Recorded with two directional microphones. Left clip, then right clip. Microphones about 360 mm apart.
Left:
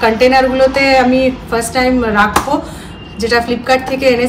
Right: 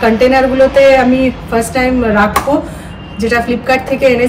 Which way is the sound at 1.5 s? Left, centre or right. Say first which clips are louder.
Right 2 dB; centre.